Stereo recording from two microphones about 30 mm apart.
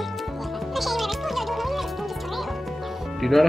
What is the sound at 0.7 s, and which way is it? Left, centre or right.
Music, centre.